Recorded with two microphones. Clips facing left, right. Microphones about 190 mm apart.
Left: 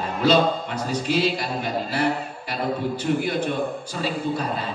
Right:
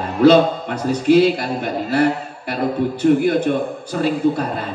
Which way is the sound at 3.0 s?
50° right (ahead or behind).